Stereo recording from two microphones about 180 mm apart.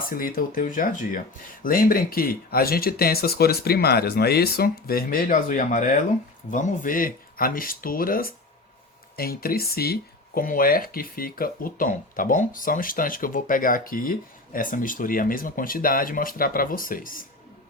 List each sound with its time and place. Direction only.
0.0 s speech: 55° left (ahead or behind)